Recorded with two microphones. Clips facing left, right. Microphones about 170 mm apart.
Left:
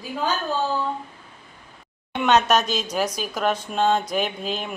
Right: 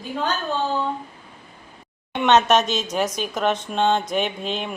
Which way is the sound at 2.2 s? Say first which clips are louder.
Right 2 dB; centre (ahead or behind).